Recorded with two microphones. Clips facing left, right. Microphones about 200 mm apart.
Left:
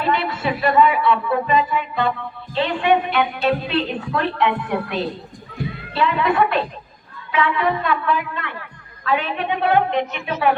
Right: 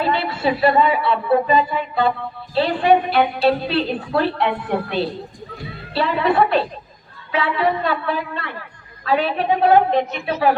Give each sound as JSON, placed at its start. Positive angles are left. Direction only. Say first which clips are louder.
{"t": 0.0, "sound": "a woman's voice", "louder": "right 2 dB", "side_deg": -30}